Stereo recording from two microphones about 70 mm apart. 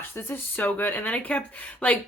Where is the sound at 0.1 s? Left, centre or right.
Left.